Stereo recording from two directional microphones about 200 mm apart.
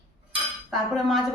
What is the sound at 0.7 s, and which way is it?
Speech, centre (ahead or behind).